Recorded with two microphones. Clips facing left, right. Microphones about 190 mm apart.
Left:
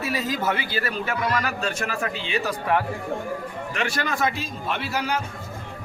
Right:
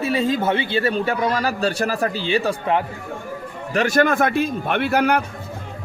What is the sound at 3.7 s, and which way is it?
A man's voice, 45° right (ahead or behind).